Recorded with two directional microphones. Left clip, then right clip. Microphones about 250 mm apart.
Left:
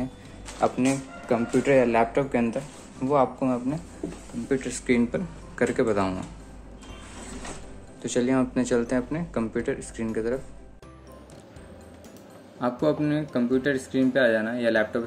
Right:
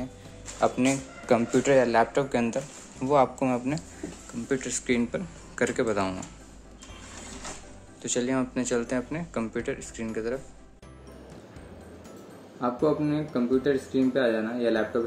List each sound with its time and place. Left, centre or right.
0.6 s speech: right
1.6 s speech: centre; by 3.8 s right
4.5 s speech: centre
8.0 s speech: centre
12.5 s speech: left